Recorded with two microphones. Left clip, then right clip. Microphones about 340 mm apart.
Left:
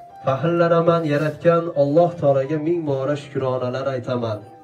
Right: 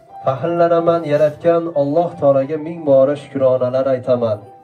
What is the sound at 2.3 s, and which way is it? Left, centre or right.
Speech, centre.